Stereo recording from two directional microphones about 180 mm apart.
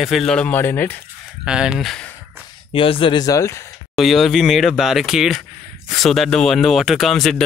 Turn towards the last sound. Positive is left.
turn(degrees=0)  # may be behind; listen again after turning